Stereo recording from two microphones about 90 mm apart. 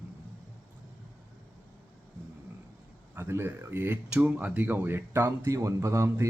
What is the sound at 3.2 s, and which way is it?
Speech, 25° right (ahead or behind).